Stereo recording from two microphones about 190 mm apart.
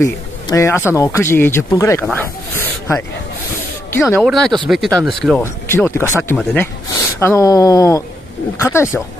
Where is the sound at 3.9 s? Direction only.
15° left (ahead or behind).